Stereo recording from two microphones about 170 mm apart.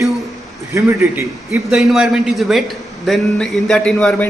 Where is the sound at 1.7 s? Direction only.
Centre (ahead or behind).